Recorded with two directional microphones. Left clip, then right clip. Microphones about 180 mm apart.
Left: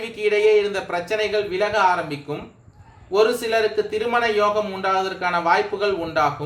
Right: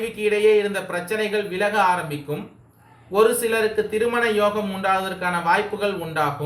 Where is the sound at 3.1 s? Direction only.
45° left (ahead or behind).